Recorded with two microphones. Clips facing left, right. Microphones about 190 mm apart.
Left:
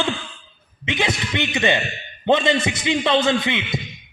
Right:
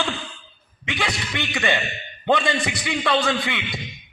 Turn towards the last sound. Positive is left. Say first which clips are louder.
# left 4 dB
turn(degrees=20)  # may be behind; listen again after turning